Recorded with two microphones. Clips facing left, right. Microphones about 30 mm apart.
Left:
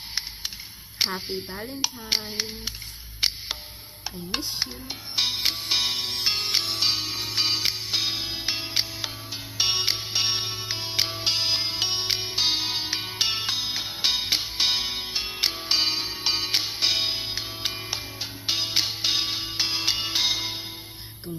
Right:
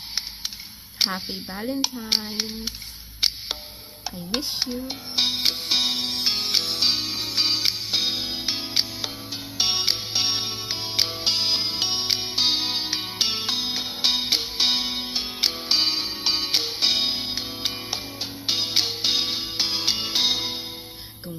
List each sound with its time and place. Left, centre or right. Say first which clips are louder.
1.0 s speech: right 1 dB; right
4.3 s stir: right 3 dB; right
4.6 s music: right 3 dB; right